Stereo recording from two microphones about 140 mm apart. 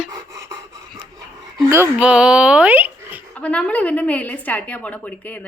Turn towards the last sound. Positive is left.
turn(degrees=10)  # may be behind; listen again after turning